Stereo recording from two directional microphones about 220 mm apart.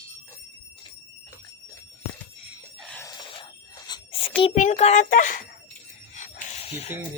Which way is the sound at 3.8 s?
20° left (ahead or behind).